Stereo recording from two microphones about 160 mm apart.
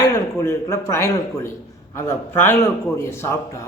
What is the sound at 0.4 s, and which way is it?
A man's voice, 15° left (ahead or behind).